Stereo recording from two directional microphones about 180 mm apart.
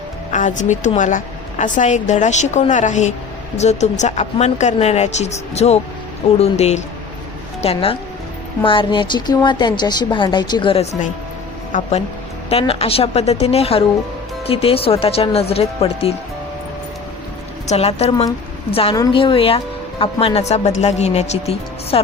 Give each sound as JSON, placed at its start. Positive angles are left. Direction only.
{"t": 0.3, "sound": "a woman's voice", "side_deg": 45}
{"t": 17.7, "sound": "speech", "side_deg": 35}